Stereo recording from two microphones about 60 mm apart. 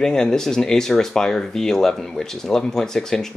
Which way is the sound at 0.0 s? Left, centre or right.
Centre.